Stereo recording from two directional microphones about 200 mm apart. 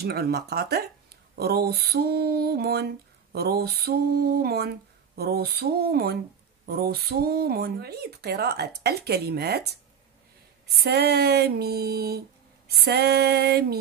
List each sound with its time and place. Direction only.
0.0 s speech: 50° right (ahead or behind)
10.8 s speech: 55° right (ahead or behind)